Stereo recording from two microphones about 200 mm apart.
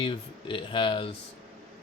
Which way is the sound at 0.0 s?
25° left (ahead or behind).